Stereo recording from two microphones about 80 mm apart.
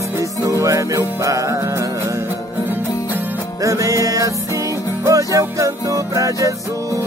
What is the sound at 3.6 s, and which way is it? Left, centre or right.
Music, right.